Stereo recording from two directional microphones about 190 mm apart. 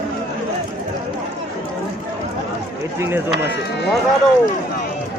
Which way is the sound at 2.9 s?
10° right (ahead or behind).